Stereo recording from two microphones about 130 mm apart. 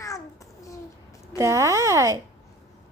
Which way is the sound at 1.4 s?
20° right (ahead or behind).